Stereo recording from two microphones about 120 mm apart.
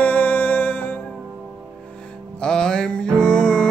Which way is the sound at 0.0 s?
15° left (ahead or behind).